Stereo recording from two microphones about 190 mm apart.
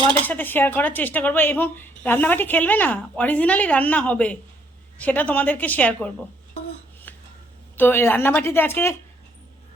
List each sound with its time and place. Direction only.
0.3 s speech: 10° left (ahead or behind)
7.1 s dishes: 10° left (ahead or behind)
7.8 s speech: 10° left (ahead or behind)